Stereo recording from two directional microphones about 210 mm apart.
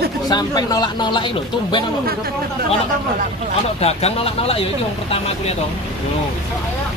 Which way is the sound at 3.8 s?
30° left (ahead or behind).